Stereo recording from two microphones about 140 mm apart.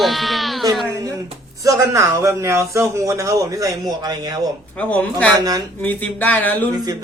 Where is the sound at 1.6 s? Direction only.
20° right (ahead or behind).